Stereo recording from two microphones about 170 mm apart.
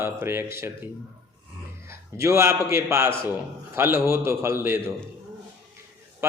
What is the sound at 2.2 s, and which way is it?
Mantra, 15° right (ahead or behind).